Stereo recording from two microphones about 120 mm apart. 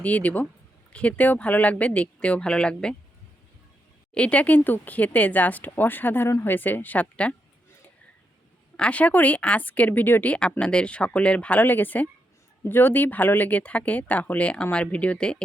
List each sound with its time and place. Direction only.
0.0 s speech: 10° left (ahead or behind)
4.1 s speech: 10° left (ahead or behind)
8.7 s speech: 10° left (ahead or behind)